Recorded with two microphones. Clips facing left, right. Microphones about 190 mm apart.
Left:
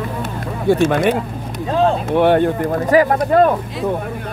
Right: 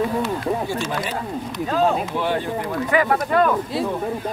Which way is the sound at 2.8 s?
40° left (ahead or behind).